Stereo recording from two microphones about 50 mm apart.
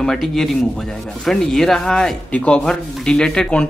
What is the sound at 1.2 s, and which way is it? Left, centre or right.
Speech, centre.